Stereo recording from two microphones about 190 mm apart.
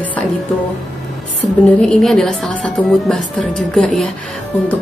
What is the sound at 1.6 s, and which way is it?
Speech, 5° left (ahead or behind).